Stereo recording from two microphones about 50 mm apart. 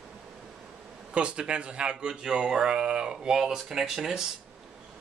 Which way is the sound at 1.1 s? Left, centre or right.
Centre.